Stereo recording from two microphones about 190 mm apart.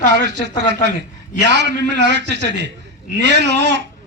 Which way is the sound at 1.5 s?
65° right (ahead or behind).